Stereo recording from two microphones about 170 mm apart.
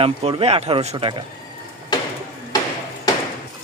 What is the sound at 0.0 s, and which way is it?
Speech, 35° right (ahead or behind).